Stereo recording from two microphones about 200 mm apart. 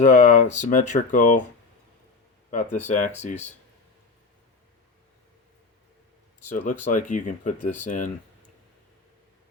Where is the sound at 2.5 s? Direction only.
35° left (ahead or behind).